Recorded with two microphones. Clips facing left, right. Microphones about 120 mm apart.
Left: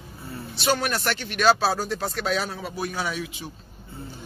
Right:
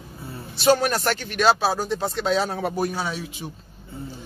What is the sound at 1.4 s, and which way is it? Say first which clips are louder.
Speech: even; 20° right (ahead or behind).